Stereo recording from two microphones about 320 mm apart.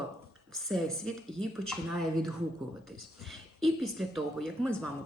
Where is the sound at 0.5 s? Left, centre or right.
Centre.